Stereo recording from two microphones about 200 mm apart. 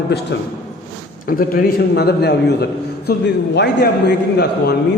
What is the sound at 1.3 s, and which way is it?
A man's voice, 45° left (ahead or behind).